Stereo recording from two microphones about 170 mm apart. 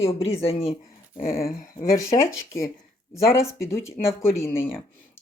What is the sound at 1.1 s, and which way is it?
Speech, 60° left (ahead or behind).